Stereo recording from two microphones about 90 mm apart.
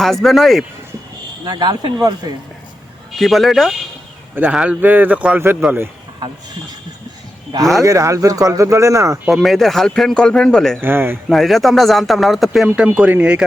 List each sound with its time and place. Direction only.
0.0 s speech: centre (ahead or behind)
1.5 s speech: 50° right (ahead or behind)
3.2 s speech: centre (ahead or behind)
4.8 s speech: 20° right (ahead or behind)
6.2 s speech: 50° right (ahead or behind)
7.8 s speech: 35° right (ahead or behind)
9.2 s speech: centre (ahead or behind)
10.8 s speech: 25° right (ahead or behind)
11.3 s speech: centre (ahead or behind)
12.6 s speech: 10° right (ahead or behind)